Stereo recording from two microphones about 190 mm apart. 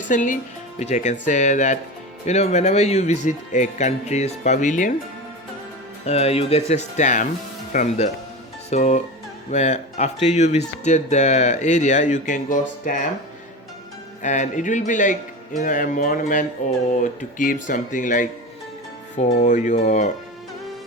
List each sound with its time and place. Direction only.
0.0 s speech: 40° left (ahead or behind)
6.1 s speech: 35° left (ahead or behind)
14.2 s speech: 40° left (ahead or behind)